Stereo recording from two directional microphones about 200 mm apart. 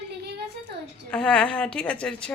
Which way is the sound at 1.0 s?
5° left (ahead or behind).